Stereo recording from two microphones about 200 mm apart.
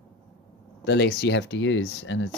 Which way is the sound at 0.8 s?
60° left (ahead or behind).